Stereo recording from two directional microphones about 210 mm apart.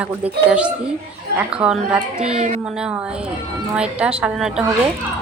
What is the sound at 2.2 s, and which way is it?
Speech, 30° right (ahead or behind).